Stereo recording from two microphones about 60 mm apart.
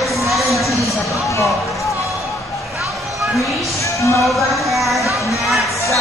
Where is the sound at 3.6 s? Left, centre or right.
Left.